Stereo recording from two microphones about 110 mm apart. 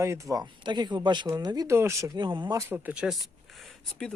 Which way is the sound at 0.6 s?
45° right (ahead or behind).